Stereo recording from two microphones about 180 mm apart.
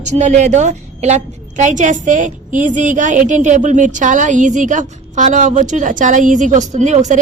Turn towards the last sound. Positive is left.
turn(degrees=-40)  # may be behind; listen again after turning